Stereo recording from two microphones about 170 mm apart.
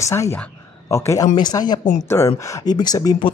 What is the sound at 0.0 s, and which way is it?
Speech, 15° left (ahead or behind).